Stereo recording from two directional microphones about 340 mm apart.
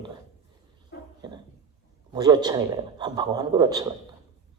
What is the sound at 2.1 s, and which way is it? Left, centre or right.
Speech, centre.